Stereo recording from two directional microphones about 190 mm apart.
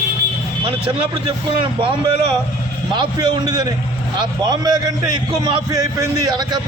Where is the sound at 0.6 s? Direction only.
25° right (ahead or behind).